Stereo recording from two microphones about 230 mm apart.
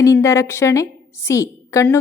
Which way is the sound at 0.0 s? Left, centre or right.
Centre.